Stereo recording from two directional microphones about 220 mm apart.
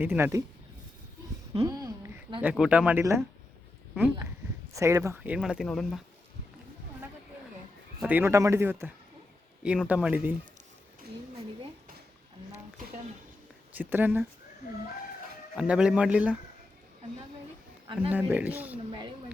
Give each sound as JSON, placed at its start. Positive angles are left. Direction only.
{"t": 0.0, "sound": "speech", "side_deg": -10}
{"t": 1.5, "sound": "speech", "side_deg": -15}
{"t": 8.0, "sound": "speech", "side_deg": -10}
{"t": 13.7, "sound": "speech", "side_deg": -10}
{"t": 15.5, "sound": "speech", "side_deg": -5}
{"t": 18.1, "sound": "speech", "side_deg": -10}
{"t": 18.9, "sound": "a sound", "side_deg": -20}